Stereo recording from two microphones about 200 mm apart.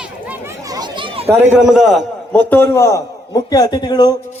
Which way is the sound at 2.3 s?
10° left (ahead or behind).